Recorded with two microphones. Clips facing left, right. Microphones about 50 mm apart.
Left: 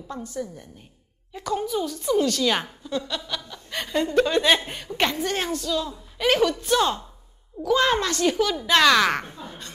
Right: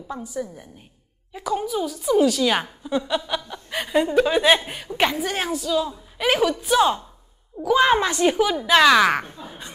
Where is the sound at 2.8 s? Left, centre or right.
Centre.